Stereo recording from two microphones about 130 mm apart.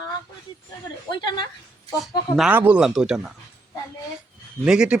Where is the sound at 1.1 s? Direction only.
35° left (ahead or behind).